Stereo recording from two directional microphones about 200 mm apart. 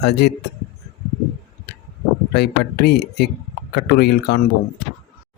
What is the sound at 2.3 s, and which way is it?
Speech, 55° left (ahead or behind).